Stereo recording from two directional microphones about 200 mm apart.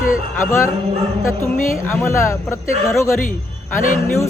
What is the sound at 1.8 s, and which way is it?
Speech, 15° left (ahead or behind).